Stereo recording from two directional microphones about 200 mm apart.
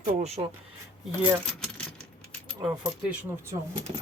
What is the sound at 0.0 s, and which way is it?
Speech, 30° right (ahead or behind).